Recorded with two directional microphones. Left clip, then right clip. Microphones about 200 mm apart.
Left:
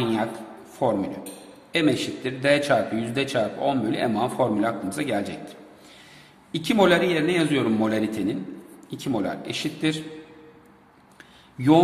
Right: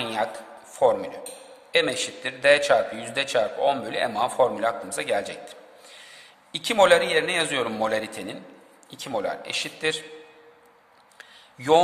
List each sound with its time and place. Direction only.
0.0 s a sound: 20° right (ahead or behind)
0.7 s a man's voice: 20° right (ahead or behind)
11.5 s a man's voice: 20° right (ahead or behind)